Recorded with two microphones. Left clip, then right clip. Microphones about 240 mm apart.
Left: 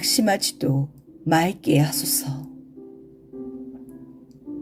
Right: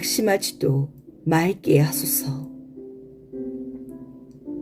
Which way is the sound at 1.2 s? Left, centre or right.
Left.